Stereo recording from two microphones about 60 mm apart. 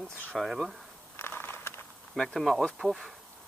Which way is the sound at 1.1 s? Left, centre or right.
Left.